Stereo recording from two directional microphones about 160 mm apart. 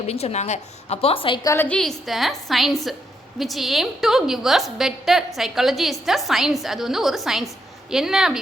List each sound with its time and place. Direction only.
0.1 s a woman's voice: 40° left (ahead or behind)
1.5 s a woman's voice: 10° left (ahead or behind)